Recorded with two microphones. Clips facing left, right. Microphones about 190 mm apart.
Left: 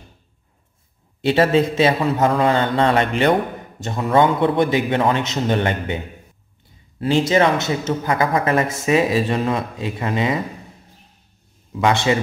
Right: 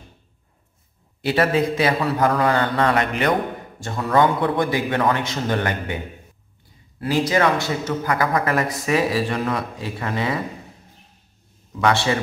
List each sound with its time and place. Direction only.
1.2 s a man's voice: 25° left (ahead or behind)
7.0 s a man's voice: 25° left (ahead or behind)
11.8 s a man's voice: 20° left (ahead or behind)